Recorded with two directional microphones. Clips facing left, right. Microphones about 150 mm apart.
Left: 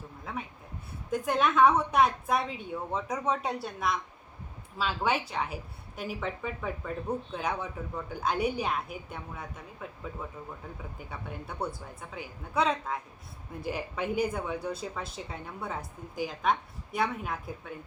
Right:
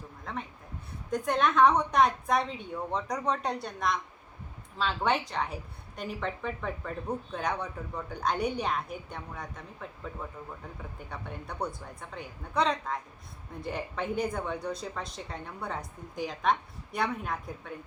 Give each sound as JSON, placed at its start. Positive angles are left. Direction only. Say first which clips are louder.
{"t": 0.3, "sound": "speech", "louder": "even", "side_deg": 5}